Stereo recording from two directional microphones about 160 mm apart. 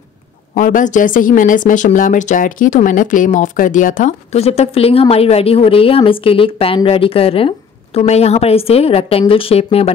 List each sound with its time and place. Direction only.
0.6 s speech: 55° left (ahead or behind); by 9.9 s 40° left (ahead or behind)